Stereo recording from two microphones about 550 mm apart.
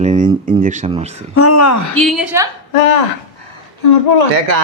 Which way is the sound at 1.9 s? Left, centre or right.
Centre.